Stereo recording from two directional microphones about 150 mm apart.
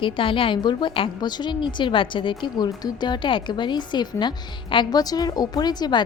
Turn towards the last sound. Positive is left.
turn(degrees=30)  # may be behind; listen again after turning